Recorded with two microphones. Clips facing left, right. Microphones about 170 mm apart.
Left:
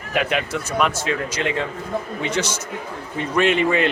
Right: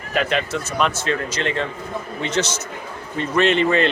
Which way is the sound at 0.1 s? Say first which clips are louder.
Right 1 dB; 10° left (ahead or behind).